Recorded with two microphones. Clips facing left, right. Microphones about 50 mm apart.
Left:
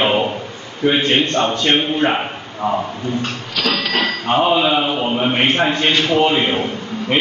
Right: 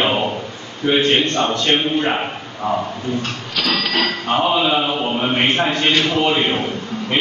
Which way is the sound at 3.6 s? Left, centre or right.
Centre.